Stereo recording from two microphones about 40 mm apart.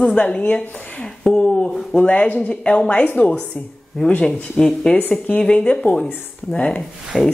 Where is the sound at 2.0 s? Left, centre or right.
Left.